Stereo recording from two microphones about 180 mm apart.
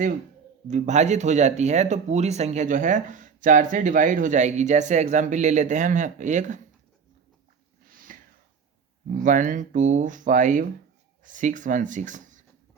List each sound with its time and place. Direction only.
0.7 s speech: 40° right (ahead or behind)
8.1 s snort: 50° right (ahead or behind)
9.0 s speech: 45° right (ahead or behind)